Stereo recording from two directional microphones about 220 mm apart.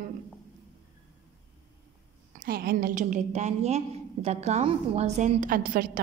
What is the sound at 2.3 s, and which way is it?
A woman's voice, 40° right (ahead or behind).